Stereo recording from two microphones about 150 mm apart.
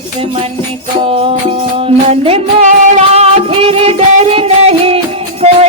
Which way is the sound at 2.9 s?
45° right (ahead or behind).